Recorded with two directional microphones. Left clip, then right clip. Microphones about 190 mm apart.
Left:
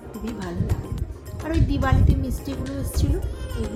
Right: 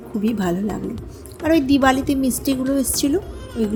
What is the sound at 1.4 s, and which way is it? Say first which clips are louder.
A woman's voice: right 10 dB; 40° right (ahead or behind).